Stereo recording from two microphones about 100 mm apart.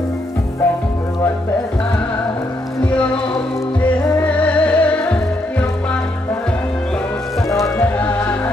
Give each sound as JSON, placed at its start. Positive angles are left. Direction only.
{"t": 2.8, "sound": "music", "side_deg": 10}
{"t": 7.8, "sound": "music", "side_deg": 15}